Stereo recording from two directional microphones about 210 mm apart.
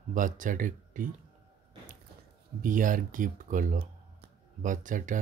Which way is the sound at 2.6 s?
40° right (ahead or behind).